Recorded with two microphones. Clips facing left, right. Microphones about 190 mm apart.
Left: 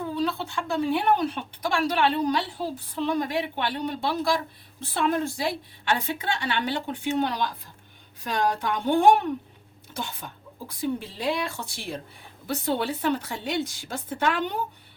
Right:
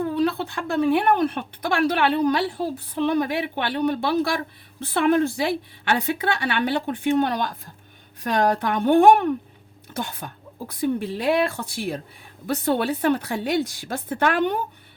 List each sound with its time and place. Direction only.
0.2 s speech: 60° right (ahead or behind)